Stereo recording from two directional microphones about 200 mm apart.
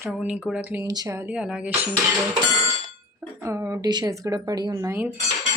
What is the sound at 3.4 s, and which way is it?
Speech, 15° right (ahead or behind).